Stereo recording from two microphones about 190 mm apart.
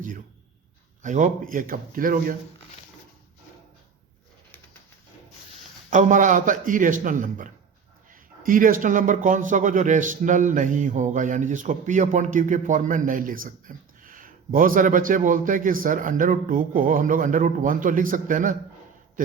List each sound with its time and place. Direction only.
1.0 s a man's voice: 40° right (ahead or behind)
5.9 s a man's voice: 40° right (ahead or behind)